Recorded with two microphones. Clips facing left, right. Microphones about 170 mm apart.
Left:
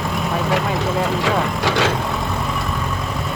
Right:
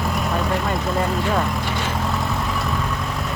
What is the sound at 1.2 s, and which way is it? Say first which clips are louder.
Vehicle: left 3 dB; 85° left.